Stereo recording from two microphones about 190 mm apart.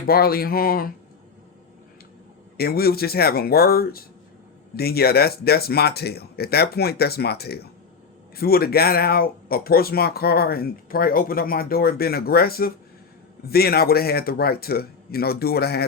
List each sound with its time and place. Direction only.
0.1 s speech: 55° left (ahead or behind)
2.6 s speech: 55° left (ahead or behind)